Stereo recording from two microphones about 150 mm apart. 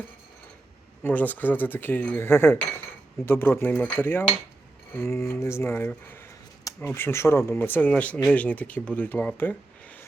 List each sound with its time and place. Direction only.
1.0 s speech: 10° left (ahead or behind)